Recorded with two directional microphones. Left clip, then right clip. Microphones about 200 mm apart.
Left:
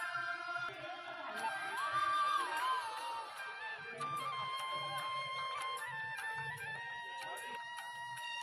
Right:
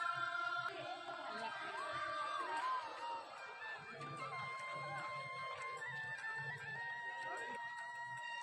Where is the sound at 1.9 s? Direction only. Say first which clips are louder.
Left 10 dB; 40° left (ahead or behind).